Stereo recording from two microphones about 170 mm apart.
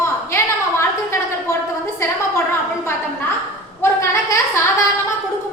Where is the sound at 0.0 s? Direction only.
15° left (ahead or behind).